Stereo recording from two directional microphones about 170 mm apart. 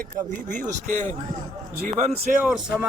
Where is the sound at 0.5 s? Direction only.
45° right (ahead or behind).